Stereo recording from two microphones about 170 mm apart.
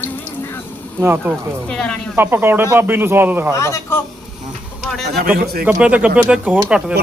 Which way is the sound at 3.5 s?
15° left (ahead or behind).